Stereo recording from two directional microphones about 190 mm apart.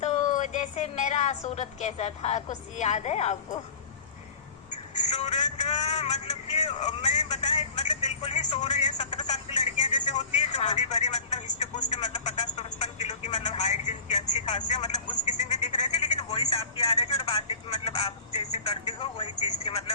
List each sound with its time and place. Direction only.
0.0 s a woman's voice: 40° left (ahead or behind)
4.9 s vehicle: 35° left (ahead or behind)
7.5 s telephone: 35° left (ahead or behind)
9.8 s speech: 35° left (ahead or behind)
18.9 s speech: 25° left (ahead or behind)